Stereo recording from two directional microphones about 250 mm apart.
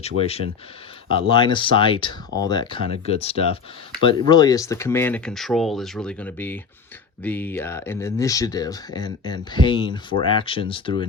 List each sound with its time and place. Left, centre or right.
0.2 s speech: left